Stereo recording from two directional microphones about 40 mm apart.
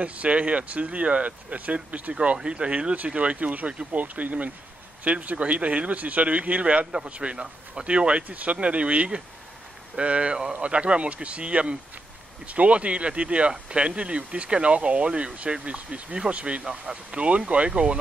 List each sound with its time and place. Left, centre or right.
0.0 s speech: right
2.1 s speech: right
16.6 s speech: right